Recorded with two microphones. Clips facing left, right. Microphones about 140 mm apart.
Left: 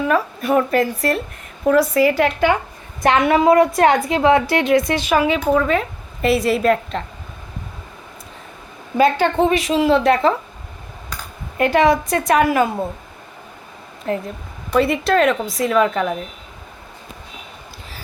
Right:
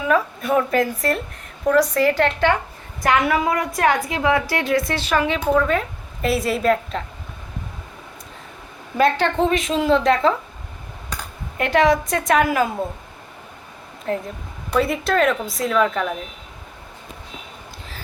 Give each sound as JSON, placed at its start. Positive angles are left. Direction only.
{"t": 0.1, "sound": "a woman's voice", "side_deg": 0}
{"t": 3.0, "sound": "a woman's voice", "side_deg": 25}
{"t": 9.0, "sound": "a woman's voice", "side_deg": 5}
{"t": 11.5, "sound": "a woman's voice", "side_deg": 0}
{"t": 14.1, "sound": "a woman's voice", "side_deg": 0}